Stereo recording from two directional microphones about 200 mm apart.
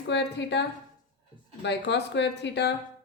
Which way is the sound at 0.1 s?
60° left (ahead or behind).